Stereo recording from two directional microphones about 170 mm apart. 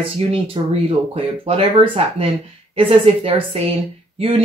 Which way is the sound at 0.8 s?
35° right (ahead or behind).